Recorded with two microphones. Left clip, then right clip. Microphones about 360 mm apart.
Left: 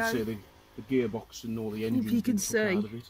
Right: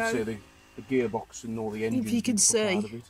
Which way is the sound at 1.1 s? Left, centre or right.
Right.